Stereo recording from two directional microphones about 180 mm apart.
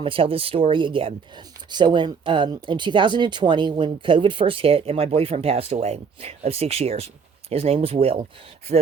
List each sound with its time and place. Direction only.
0.0 s speech: 30° right (ahead or behind)